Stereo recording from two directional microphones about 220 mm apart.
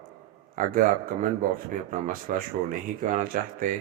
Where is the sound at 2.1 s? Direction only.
40° right (ahead or behind).